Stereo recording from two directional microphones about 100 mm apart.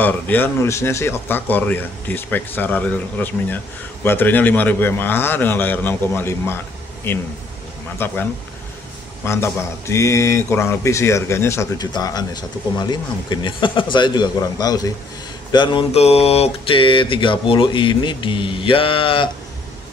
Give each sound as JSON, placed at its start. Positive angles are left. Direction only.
{"t": 0.0, "sound": "speech", "side_deg": 20}
{"t": 9.2, "sound": "speech", "side_deg": 25}
{"t": 11.8, "sound": "speech", "side_deg": 40}
{"t": 15.5, "sound": "speech", "side_deg": 55}
{"t": 15.9, "sound": "speech", "side_deg": 90}